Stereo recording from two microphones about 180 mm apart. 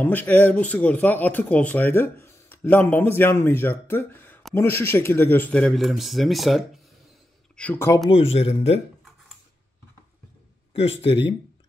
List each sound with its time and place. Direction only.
0.0 s speech: 10° left (ahead or behind)
8.1 s speech: 35° left (ahead or behind)
10.7 s speech: 35° left (ahead or behind)